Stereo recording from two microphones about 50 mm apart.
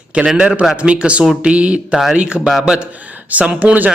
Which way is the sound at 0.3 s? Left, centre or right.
Centre.